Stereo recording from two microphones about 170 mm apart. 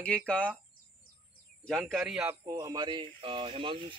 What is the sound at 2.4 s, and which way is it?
A man's voice, 20° right (ahead or behind).